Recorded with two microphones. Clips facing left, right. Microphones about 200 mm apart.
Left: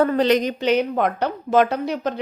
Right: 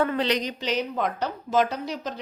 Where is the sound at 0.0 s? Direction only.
40° left (ahead or behind).